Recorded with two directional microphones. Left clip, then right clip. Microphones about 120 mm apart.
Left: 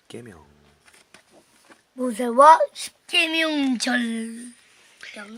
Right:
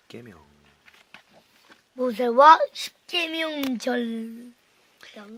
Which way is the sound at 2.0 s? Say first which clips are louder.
Left 1 dB; 75° right (ahead or behind).